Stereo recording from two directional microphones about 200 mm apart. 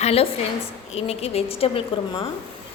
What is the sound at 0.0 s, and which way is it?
A woman's voice, 30° left (ahead or behind).